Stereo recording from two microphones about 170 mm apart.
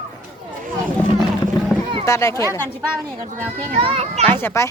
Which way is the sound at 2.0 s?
20° left (ahead or behind).